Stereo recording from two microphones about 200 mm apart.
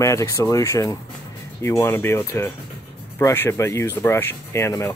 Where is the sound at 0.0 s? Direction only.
15° left (ahead or behind).